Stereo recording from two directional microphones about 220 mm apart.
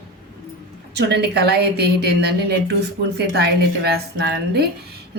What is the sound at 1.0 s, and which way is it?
A woman's voice, 50° right (ahead or behind).